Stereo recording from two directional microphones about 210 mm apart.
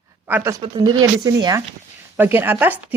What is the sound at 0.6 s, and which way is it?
Speech, 20° right (ahead or behind).